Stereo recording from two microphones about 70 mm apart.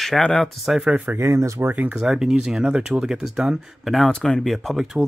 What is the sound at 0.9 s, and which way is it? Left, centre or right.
Speech, right.